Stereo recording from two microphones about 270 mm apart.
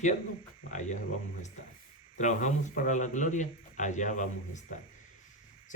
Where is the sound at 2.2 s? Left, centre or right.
Left.